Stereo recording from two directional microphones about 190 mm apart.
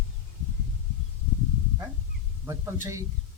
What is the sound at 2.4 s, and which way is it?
Speech, 15° right (ahead or behind).